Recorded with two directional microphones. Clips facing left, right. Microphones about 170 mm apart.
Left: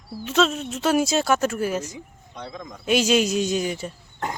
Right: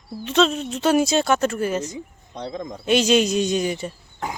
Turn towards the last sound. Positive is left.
turn(degrees=0)  # may be behind; listen again after turning